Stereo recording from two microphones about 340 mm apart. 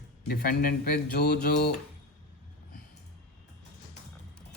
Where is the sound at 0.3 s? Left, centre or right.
Left.